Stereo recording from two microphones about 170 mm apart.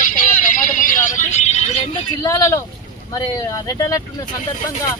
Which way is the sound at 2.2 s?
20° left (ahead or behind).